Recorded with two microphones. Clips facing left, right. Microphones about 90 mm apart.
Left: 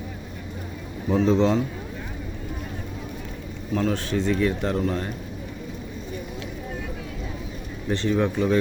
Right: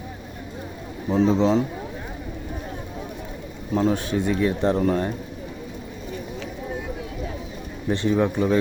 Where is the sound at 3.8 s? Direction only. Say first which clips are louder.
Right 3 dB; 20° right (ahead or behind).